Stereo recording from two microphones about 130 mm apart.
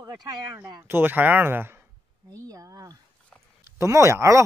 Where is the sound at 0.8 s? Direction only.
15° right (ahead or behind).